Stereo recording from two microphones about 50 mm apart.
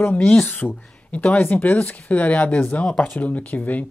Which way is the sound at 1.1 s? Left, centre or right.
Left.